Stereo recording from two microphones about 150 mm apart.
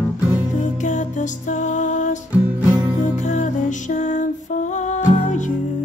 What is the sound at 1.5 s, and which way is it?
Music, 55° left (ahead or behind).